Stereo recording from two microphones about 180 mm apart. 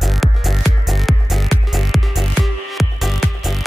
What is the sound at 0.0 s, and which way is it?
Music, centre (ahead or behind).